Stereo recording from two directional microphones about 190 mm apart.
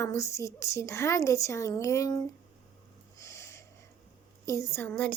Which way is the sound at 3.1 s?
15° left (ahead or behind).